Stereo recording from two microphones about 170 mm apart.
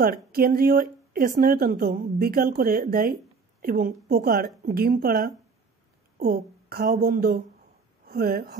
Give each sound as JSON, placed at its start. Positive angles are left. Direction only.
{"t": 0.0, "sound": "speech", "side_deg": -60}